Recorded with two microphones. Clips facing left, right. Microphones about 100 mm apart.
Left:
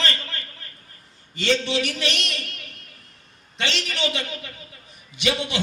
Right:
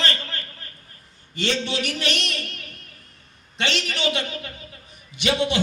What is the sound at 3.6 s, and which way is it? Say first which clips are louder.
Speech: right 1 dB; 35° right (ahead or behind).